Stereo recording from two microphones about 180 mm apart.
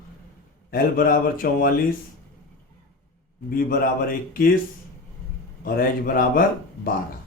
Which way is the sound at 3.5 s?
55° left (ahead or behind).